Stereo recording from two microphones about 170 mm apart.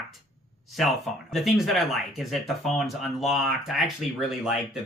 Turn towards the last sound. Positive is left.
turn(degrees=-5)  # may be behind; listen again after turning